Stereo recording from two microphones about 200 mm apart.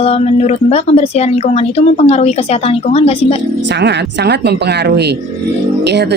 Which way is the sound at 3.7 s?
60° right (ahead or behind).